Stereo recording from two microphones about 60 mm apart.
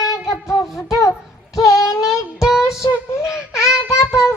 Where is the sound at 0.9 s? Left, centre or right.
Left.